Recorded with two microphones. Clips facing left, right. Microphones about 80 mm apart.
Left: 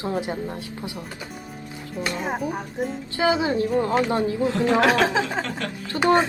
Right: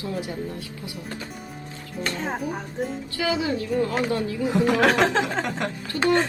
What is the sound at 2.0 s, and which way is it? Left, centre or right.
Speech, centre.